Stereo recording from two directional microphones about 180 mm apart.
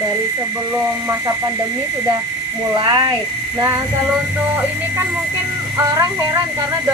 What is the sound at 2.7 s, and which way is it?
Speech, 25° right (ahead or behind).